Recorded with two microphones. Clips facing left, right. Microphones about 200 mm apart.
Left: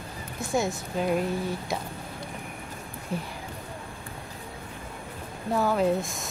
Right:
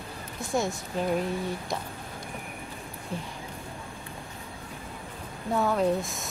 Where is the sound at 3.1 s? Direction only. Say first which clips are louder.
Left 3 dB; 10° left (ahead or behind).